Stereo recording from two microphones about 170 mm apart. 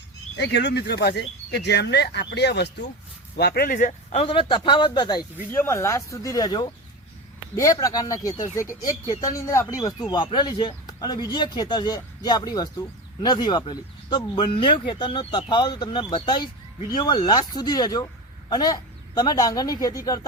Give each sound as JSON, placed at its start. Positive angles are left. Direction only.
{"t": 0.3, "sound": "speech", "side_deg": 90}
{"t": 3.3, "sound": "speech", "side_deg": 70}
{"t": 5.5, "sound": "speech", "side_deg": 15}